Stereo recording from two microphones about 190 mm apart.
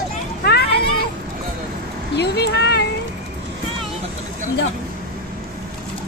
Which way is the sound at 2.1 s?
60° left (ahead or behind).